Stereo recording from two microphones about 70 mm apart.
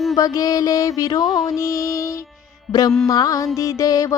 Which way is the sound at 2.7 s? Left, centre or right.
Left.